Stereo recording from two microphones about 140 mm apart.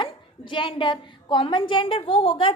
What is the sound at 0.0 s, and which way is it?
A woman's voice, 35° left (ahead or behind).